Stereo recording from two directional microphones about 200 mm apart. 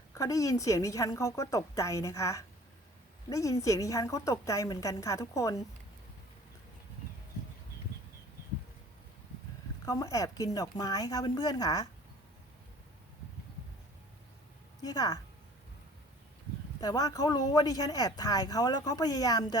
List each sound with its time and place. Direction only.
0.1 s a woman's voice: 15° left (ahead or behind)
9.8 s a woman's voice: 15° left (ahead or behind)
14.8 s a woman's voice: 20° left (ahead or behind)
16.8 s speech: 20° left (ahead or behind)